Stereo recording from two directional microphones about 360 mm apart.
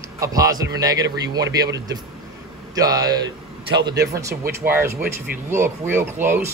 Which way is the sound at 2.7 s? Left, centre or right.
Centre.